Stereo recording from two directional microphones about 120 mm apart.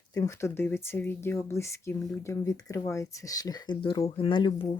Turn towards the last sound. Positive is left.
turn(degrees=45)  # may be behind; listen again after turning